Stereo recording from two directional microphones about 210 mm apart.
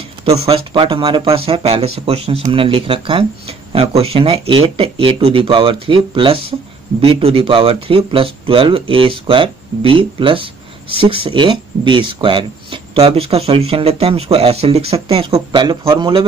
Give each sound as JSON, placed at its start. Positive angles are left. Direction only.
{"t": 0.2, "sound": "speech", "side_deg": -25}